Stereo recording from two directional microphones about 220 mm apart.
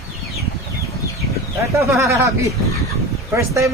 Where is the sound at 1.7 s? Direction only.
15° right (ahead or behind).